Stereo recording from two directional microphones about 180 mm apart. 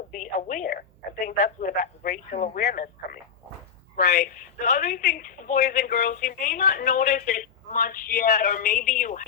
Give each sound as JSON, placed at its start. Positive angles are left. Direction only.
{"t": 0.1, "sound": "a woman's voice", "side_deg": 45}